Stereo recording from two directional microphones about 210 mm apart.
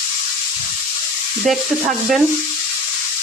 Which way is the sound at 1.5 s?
Centre (ahead or behind).